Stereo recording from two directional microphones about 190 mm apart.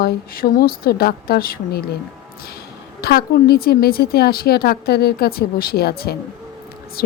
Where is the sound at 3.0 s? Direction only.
55° left (ahead or behind).